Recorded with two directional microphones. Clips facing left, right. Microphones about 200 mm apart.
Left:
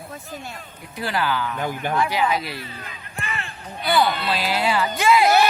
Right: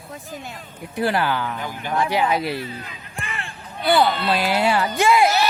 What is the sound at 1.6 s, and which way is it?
Speech, 50° left (ahead or behind).